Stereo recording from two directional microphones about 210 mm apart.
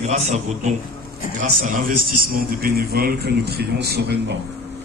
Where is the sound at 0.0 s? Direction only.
35° right (ahead or behind).